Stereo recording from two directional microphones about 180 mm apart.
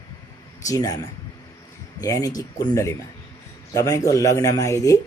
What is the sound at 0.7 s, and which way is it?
Speech, 20° left (ahead or behind).